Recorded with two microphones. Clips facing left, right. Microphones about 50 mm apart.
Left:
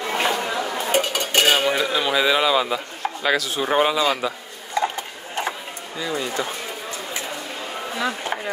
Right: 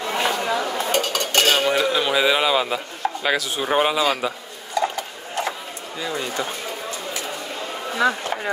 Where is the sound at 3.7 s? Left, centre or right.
Centre.